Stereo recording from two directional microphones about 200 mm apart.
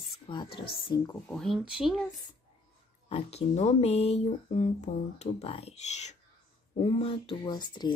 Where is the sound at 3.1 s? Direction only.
30° left (ahead or behind).